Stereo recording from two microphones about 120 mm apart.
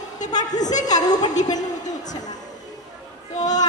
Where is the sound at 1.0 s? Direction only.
35° left (ahead or behind).